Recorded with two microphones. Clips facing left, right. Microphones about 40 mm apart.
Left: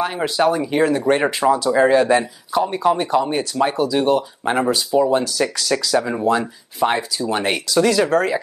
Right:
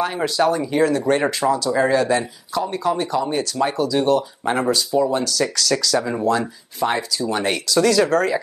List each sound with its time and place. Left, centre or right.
0.0 s speech: centre